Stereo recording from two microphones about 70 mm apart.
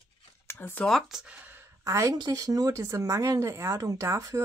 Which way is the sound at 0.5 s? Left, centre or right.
Left.